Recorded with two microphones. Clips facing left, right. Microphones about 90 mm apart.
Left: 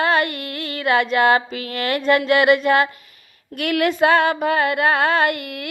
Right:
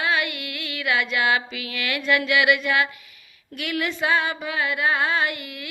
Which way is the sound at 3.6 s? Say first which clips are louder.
Left 8 dB; 55° left (ahead or behind).